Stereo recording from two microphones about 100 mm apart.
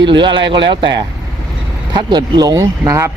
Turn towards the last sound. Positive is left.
turn(degrees=-30)  # may be behind; listen again after turning